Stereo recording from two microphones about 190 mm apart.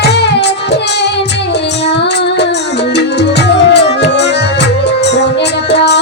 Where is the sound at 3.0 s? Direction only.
65° left (ahead or behind).